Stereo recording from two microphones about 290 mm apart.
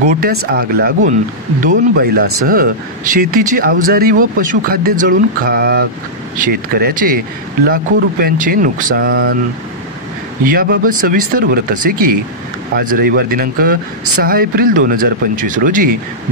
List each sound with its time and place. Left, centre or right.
0.0 s speech: right
10.4 s speech: right
12.7 s speech: right